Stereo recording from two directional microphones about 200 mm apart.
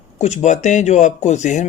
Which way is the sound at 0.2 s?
35° left (ahead or behind).